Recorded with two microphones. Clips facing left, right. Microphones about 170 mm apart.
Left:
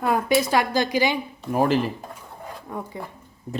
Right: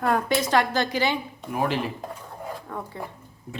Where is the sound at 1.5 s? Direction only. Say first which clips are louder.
Left 5 dB; 35° left (ahead or behind).